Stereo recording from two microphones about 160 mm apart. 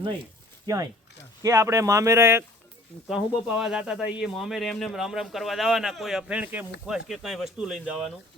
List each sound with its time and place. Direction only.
0.6 s speech: 20° right (ahead or behind)
3.1 s speech: 5° right (ahead or behind)